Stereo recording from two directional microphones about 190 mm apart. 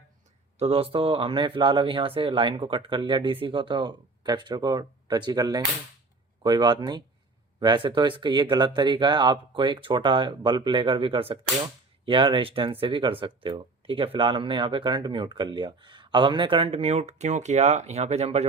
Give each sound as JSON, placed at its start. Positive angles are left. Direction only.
{"t": 0.6, "sound": "speech", "side_deg": -30}